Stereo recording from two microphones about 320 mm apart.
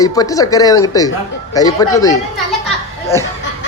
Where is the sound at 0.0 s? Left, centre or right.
Centre.